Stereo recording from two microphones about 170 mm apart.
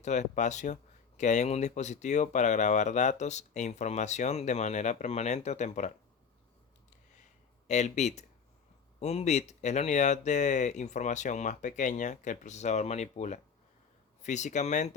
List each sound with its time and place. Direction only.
0.0 s speech: 45° left (ahead or behind)
7.7 s speech: 40° left (ahead or behind)